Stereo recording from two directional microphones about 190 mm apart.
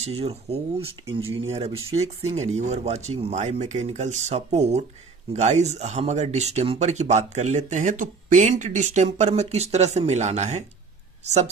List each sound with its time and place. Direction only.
0.2 s speech: 30° right (ahead or behind)